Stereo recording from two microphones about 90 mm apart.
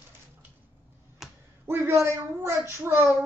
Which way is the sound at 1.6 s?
25° right (ahead or behind).